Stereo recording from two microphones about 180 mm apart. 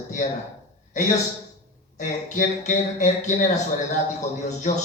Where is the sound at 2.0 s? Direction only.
45° left (ahead or behind).